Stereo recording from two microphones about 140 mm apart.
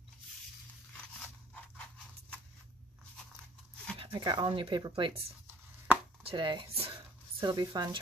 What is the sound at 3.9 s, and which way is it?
Speech, 35° right (ahead or behind).